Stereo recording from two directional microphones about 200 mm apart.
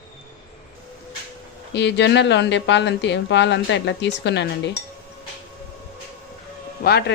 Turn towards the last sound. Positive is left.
turn(degrees=45)  # may be behind; listen again after turning